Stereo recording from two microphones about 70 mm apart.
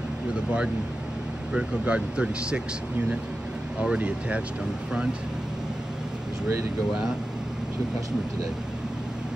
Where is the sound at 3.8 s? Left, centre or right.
Centre.